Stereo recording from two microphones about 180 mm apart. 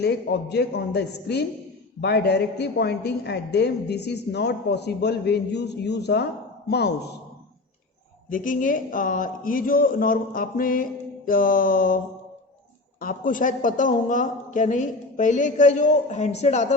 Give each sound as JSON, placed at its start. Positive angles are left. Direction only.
{"t": 0.0, "sound": "a woman's voice", "side_deg": 65}
{"t": 8.3, "sound": "a woman's voice", "side_deg": 50}
{"t": 13.0, "sound": "a woman's voice", "side_deg": 50}